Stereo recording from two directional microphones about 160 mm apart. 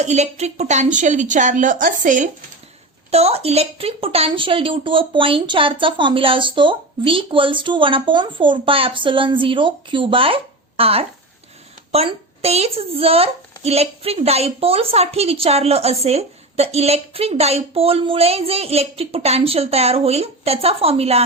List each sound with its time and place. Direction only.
0.0 s a woman's voice: 45° right (ahead or behind)
3.1 s a woman's voice: 40° right (ahead or behind)